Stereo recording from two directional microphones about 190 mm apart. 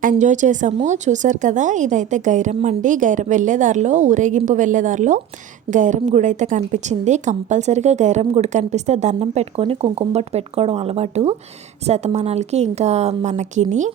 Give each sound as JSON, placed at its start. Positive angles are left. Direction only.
{"t": 0.0, "sound": "a woman's voice", "side_deg": -40}